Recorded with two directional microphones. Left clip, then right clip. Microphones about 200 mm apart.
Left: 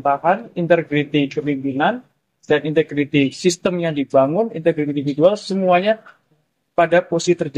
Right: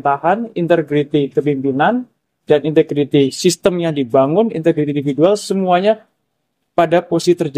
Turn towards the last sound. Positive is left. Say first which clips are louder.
# right 2 dB
turn(degrees=-80)